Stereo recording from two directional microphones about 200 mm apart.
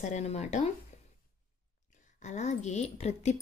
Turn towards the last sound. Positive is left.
turn(degrees=35)  # may be behind; listen again after turning